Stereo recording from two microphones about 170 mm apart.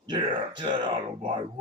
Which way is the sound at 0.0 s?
30° right (ahead or behind).